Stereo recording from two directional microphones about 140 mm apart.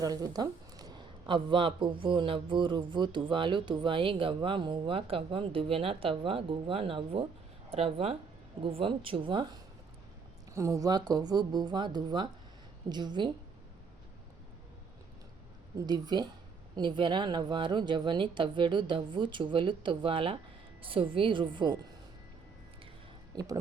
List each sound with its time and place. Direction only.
0.0 s speech: 25° right (ahead or behind)
10.5 s speech: 20° right (ahead or behind)
15.9 s speech: 30° right (ahead or behind)
23.3 s speech: 25° right (ahead or behind)